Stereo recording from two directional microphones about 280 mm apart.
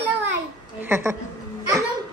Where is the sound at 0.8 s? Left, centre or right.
Centre.